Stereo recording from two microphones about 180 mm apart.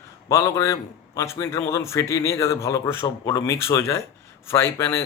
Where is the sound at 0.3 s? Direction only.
15° left (ahead or behind).